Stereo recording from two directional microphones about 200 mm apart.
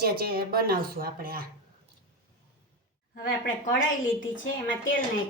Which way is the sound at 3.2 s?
45° left (ahead or behind).